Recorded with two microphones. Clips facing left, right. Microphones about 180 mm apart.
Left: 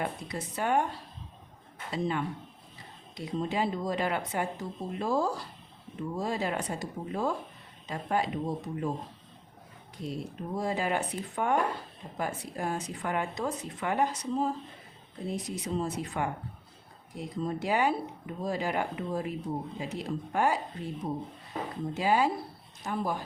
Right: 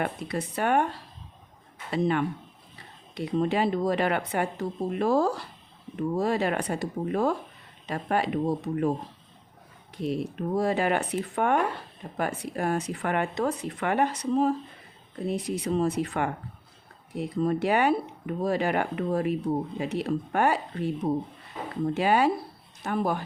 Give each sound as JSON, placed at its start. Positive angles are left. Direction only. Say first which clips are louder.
{"t": 0.0, "sound": "speech", "louder": "right 5 dB", "side_deg": -65}
{"t": 10.0, "sound": "speech", "louder": "right 7 dB", "side_deg": -70}